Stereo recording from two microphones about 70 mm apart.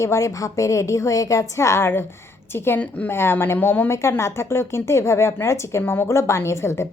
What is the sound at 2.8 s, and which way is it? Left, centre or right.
Speech, left.